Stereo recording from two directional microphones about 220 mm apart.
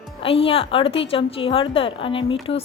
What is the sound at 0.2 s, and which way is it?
A woman's voice, 25° left (ahead or behind).